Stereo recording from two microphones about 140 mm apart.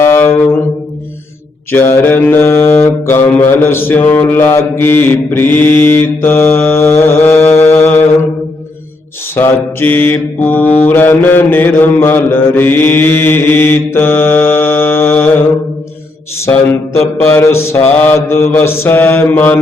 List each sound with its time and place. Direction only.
0.0 s brass instrument: 15° left (ahead or behind)
1.7 s mantra: 15° left (ahead or behind)
9.3 s mantra: 15° left (ahead or behind)
16.4 s mantra: 20° left (ahead or behind)